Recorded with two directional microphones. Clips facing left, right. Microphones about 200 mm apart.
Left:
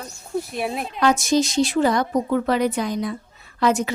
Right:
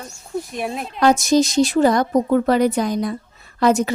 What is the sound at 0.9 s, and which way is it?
A woman's voice, 40° right (ahead or behind).